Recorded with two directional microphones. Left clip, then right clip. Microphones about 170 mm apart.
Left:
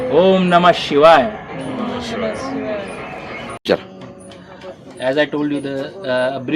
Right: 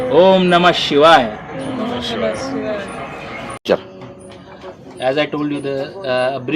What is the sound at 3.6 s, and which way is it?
Speech, 30° left (ahead or behind).